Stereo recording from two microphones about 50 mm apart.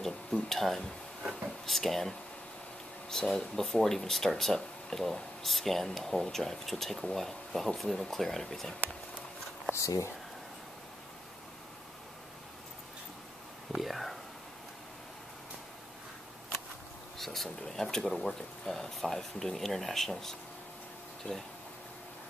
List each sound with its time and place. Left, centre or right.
0.0 s speech: centre
9.8 s speech: left
13.7 s speech: centre
17.2 s speech: centre
21.2 s speech: left